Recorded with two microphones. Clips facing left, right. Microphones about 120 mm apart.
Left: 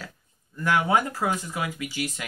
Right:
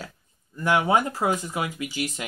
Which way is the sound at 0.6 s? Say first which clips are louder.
Right 1 dB; 20° right (ahead or behind).